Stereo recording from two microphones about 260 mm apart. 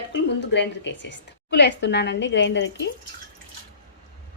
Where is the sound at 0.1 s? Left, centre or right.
Left.